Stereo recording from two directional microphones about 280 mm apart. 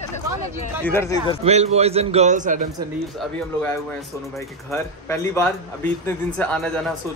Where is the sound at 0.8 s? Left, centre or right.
Centre.